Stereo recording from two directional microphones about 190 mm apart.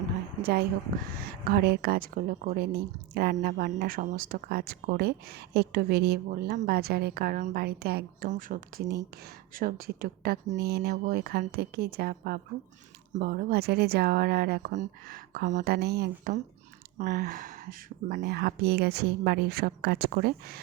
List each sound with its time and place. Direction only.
1.1 s speech: 55° right (ahead or behind)
8.3 s speech: 45° right (ahead or behind)
14.7 s speech: 45° right (ahead or behind)
15.7 s speech: 60° right (ahead or behind)